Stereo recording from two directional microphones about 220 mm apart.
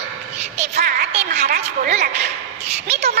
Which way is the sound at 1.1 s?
30° right (ahead or behind).